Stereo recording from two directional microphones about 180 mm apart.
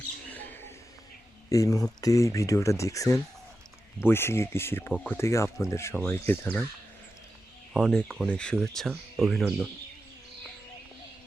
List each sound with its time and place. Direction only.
0.3 s mouse: 10° left (ahead or behind)
1.5 s speech: 20° left (ahead or behind)
7.7 s speech: 5° left (ahead or behind)